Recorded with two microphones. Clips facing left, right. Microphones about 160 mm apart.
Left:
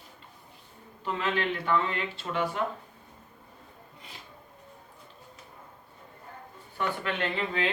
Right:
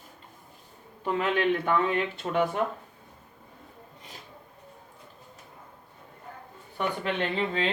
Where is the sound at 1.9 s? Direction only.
55° right (ahead or behind).